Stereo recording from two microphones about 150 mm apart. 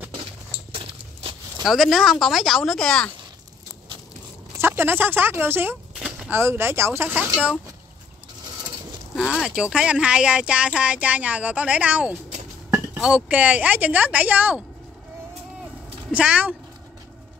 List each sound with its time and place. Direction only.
0.2 s a sound: 40° right (ahead or behind)
1.6 s speech: centre (ahead or behind)
4.6 s speech: 15° right (ahead or behind)
5.9 s a sound: 5° right (ahead or behind)
6.3 s speech: 15° right (ahead or behind)
9.1 s speech: centre (ahead or behind)
16.1 s speech: 10° right (ahead or behind)